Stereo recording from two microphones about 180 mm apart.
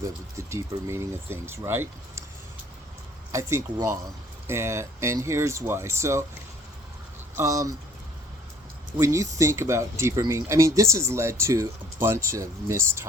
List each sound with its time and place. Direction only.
0.0 s speech: 15° right (ahead or behind)
3.3 s speech: 15° right (ahead or behind)
7.3 s speech: 15° right (ahead or behind)
9.0 s speech: 15° right (ahead or behind)